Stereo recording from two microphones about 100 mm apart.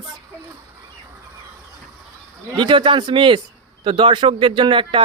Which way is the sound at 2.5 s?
50° right (ahead or behind).